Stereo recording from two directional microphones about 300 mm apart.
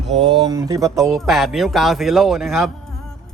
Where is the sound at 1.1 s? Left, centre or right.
Centre.